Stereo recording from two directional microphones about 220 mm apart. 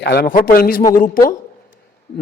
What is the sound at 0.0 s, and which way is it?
A man's voice, 50° left (ahead or behind).